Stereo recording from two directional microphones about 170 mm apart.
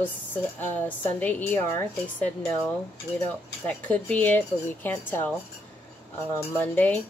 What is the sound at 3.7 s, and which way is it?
Speech, 10° left (ahead or behind).